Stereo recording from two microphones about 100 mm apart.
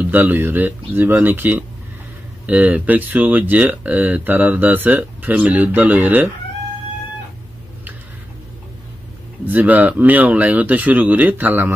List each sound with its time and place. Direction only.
0.0 s speech: 20° right (ahead or behind)
9.5 s speech: 15° right (ahead or behind)